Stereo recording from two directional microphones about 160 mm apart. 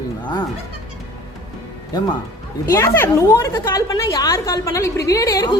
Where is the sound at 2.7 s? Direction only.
20° left (ahead or behind).